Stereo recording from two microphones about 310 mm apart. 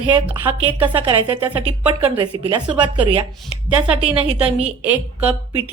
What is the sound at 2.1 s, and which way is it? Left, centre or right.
Speech, centre.